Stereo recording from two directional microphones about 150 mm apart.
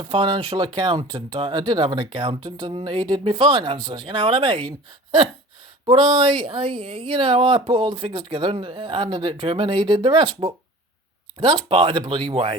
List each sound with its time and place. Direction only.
0.0 s speech: 30° right (ahead or behind)
5.8 s speech: 35° right (ahead or behind)
6.7 s a woman's voice: 5° left (ahead or behind)
6.9 s speech: 35° right (ahead or behind)
11.3 s speech: 30° right (ahead or behind)